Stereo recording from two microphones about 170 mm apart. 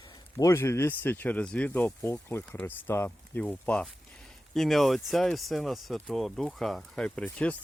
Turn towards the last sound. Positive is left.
turn(degrees=5)  # may be behind; listen again after turning